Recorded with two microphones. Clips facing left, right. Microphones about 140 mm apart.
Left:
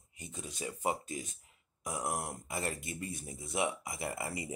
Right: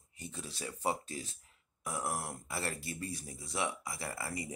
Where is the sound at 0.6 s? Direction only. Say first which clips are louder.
Left 1 dB; 15° left (ahead or behind).